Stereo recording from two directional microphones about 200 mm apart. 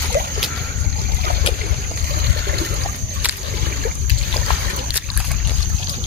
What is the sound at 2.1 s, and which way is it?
Water, 50° right (ahead or behind).